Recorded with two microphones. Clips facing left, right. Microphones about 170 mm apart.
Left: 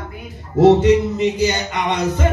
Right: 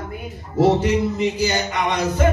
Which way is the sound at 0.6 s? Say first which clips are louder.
Left 5 dB; 25° left (ahead or behind).